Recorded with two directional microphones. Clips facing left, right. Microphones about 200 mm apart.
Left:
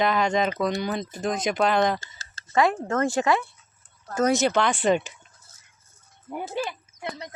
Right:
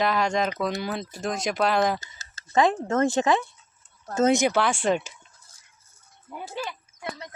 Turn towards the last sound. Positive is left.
turn(degrees=20)  # may be behind; listen again after turning